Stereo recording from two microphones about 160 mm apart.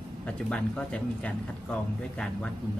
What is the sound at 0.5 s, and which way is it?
Speech, 10° left (ahead or behind).